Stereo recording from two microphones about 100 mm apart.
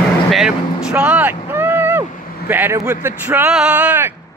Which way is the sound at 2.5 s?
25° right (ahead or behind).